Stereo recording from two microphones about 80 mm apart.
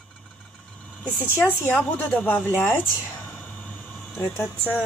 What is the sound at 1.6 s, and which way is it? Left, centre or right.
Speech, centre.